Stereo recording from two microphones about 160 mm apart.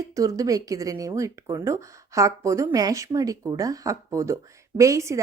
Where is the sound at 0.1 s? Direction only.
20° right (ahead or behind).